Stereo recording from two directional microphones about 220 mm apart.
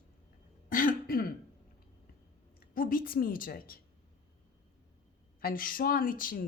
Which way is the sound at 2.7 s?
40° left (ahead or behind).